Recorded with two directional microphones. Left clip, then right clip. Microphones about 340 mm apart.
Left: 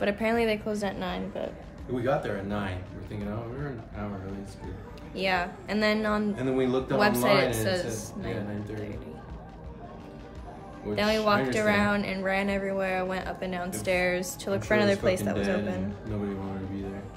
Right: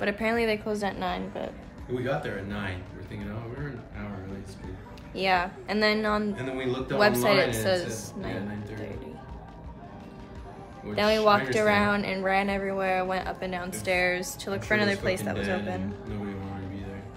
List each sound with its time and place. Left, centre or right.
0.0 s a woman's voice: centre
5.1 s speech: centre
6.3 s a woman's voice: centre
7.0 s speech: centre
11.0 s a woman's voice: centre